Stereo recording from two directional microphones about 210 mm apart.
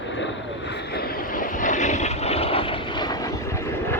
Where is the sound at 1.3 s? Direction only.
40° left (ahead or behind); by 3.1 s 25° left (ahead or behind).